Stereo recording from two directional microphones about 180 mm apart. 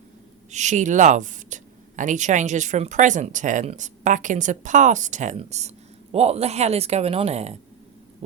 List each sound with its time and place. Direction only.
0.5 s speech: 40° right (ahead or behind)